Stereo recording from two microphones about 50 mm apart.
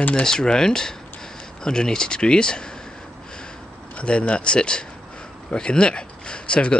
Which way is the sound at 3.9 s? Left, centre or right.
Left.